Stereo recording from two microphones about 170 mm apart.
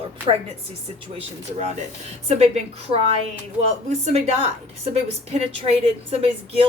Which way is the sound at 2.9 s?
35° right (ahead or behind).